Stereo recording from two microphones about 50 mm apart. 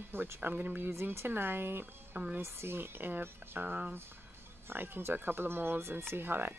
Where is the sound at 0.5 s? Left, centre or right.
Right.